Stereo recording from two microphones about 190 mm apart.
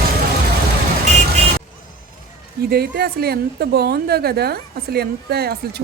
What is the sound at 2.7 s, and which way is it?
A woman's voice, 55° right (ahead or behind).